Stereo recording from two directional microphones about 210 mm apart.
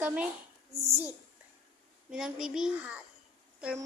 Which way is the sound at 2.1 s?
Centre (ahead or behind).